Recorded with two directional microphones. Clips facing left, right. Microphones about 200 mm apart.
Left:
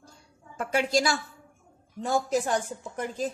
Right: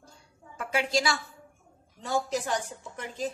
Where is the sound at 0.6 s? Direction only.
45° left (ahead or behind).